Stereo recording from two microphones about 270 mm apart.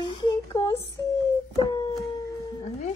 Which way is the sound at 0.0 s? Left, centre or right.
Centre.